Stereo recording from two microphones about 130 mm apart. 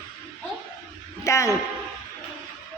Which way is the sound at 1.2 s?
20° left (ahead or behind).